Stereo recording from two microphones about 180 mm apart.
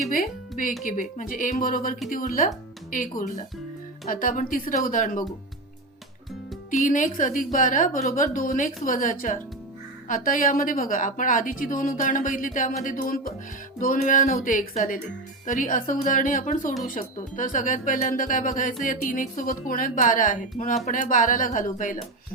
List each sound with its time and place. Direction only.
0.9 s a woman's voice: 50° left (ahead or behind)
6.7 s a woman's voice: 45° left (ahead or behind)